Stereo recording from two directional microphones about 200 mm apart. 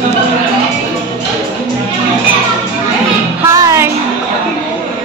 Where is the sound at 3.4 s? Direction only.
15° right (ahead or behind).